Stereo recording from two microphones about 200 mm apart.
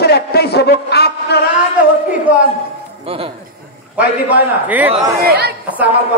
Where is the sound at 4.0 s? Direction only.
10° right (ahead or behind).